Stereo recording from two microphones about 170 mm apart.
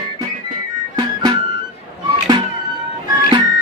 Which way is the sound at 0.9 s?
25° right (ahead or behind).